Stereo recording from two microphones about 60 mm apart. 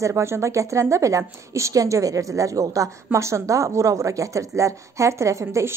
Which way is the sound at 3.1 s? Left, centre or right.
Right.